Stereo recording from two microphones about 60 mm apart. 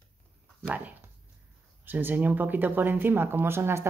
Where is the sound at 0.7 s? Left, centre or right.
Right.